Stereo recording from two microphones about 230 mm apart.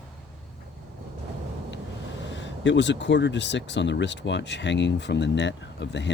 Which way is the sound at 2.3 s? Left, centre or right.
Left.